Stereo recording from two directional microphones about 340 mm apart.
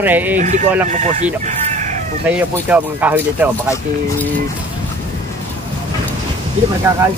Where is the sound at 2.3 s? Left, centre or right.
Centre.